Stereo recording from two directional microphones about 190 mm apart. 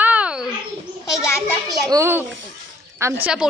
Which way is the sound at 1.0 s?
15° left (ahead or behind).